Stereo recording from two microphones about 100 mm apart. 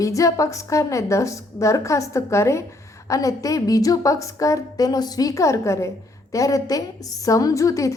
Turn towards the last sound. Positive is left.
turn(degrees=30)  # may be behind; listen again after turning